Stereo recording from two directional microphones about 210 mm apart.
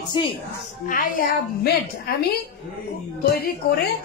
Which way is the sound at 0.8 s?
40° left (ahead or behind).